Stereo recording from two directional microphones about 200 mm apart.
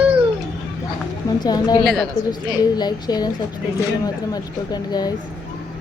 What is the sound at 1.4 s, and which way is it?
A woman's voice, 20° left (ahead or behind).